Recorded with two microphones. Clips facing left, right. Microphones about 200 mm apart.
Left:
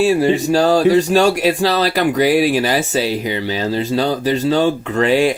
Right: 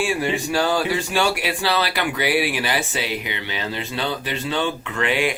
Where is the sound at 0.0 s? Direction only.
40° left (ahead or behind).